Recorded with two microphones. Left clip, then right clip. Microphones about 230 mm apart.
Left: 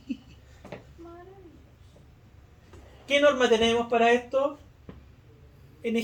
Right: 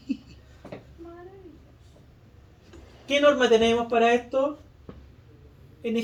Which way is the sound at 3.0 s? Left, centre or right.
Left.